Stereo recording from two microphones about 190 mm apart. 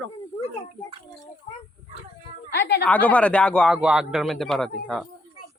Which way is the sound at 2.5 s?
60° left (ahead or behind).